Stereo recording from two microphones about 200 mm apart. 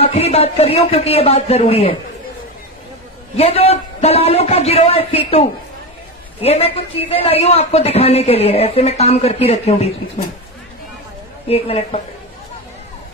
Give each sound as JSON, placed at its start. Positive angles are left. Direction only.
{"t": 0.0, "sound": "speech", "side_deg": 30}
{"t": 3.3, "sound": "speech", "side_deg": 30}
{"t": 11.4, "sound": "speech", "side_deg": 30}